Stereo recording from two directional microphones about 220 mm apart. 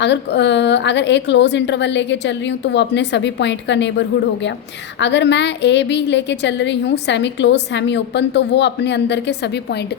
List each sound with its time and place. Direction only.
0.0 s a woman's voice: 50° left (ahead or behind)